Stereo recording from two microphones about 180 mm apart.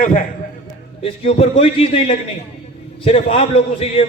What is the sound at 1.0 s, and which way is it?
A man's voice, 35° left (ahead or behind).